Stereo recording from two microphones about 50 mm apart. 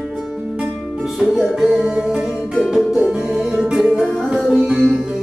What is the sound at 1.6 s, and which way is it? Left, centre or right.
Music, centre.